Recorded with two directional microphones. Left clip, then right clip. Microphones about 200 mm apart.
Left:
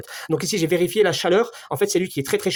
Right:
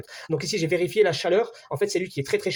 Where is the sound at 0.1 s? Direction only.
30° left (ahead or behind).